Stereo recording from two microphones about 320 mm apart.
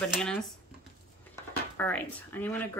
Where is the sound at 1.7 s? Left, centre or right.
Centre.